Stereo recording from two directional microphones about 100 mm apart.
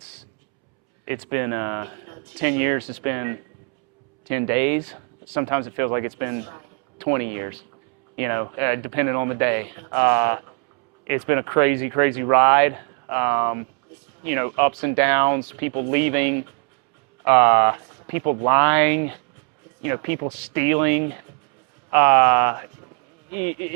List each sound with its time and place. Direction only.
1.0 s speech: 20° right (ahead or behind)